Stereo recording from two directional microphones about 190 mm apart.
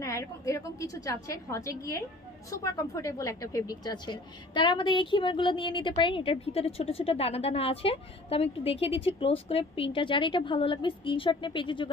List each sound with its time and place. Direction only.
0.0 s a woman's voice: 15° left (ahead or behind)